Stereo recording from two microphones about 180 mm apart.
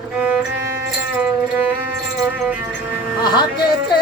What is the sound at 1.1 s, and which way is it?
Music, 5° right (ahead or behind).